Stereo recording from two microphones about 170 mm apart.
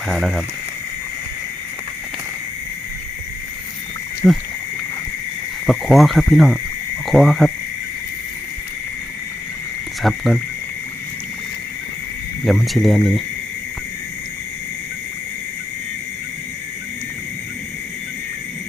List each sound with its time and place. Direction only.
0.1 s speech: centre (ahead or behind)
4.2 s speech: 5° left (ahead or behind)
5.6 s speech: centre (ahead or behind)
10.0 s speech: centre (ahead or behind)
12.5 s speech: centre (ahead or behind)